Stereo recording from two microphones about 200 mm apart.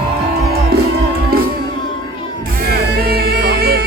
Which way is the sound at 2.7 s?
50° right (ahead or behind).